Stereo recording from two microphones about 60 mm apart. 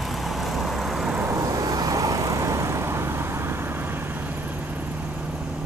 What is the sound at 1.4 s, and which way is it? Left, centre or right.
Vehicle, right.